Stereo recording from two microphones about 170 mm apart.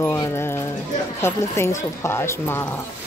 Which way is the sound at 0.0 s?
15° left (ahead or behind).